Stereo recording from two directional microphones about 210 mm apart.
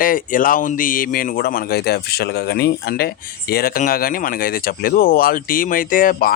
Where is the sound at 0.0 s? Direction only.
40° left (ahead or behind).